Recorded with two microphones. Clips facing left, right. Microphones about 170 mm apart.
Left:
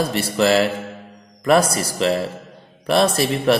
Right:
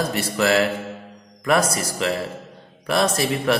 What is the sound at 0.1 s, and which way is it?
A man's voice, 30° left (ahead or behind).